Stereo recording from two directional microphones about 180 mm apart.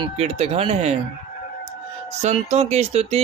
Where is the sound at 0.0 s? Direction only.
35° right (ahead or behind).